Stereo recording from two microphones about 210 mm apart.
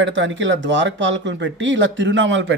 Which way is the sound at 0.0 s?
60° right (ahead or behind).